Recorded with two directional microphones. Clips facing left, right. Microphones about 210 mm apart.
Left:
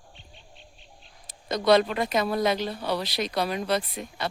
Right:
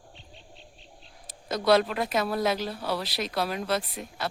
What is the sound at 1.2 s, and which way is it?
Speech, 5° right (ahead or behind).